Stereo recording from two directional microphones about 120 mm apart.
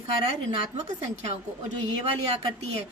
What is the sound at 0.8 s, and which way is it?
Speech, 70° right (ahead or behind).